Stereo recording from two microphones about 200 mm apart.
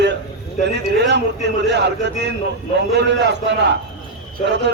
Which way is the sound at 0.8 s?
60° right (ahead or behind).